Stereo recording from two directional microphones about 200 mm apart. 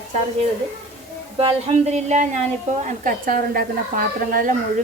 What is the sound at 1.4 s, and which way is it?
A woman's voice, 35° right (ahead or behind).